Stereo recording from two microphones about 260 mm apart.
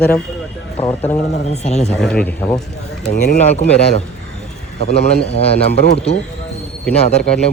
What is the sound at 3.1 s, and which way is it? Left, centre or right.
Speech, left.